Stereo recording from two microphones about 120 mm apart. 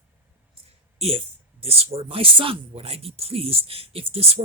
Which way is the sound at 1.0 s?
55° right (ahead or behind).